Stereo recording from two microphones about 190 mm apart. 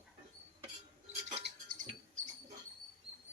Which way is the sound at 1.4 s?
50° right (ahead or behind).